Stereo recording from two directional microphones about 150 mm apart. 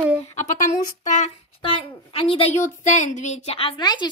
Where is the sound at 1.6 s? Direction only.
35° left (ahead or behind).